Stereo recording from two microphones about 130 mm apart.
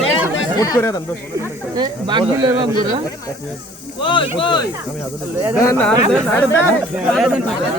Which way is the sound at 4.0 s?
40° left (ahead or behind).